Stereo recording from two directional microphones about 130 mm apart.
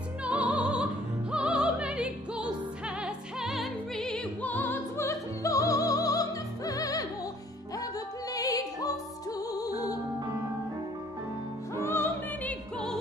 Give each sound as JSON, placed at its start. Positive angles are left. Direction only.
{"t": 0.2, "sound": "music", "side_deg": -10}
{"t": 1.3, "sound": "opera", "side_deg": -5}
{"t": 3.0, "sound": "music", "side_deg": -5}
{"t": 11.7, "sound": "opera", "side_deg": 20}